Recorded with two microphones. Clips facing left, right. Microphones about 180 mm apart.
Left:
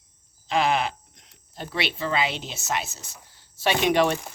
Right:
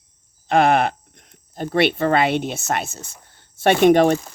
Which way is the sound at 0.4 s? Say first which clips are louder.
Right 7 dB; 55° right (ahead or behind).